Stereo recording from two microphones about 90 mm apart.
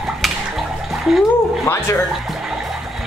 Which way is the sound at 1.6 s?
30° left (ahead or behind).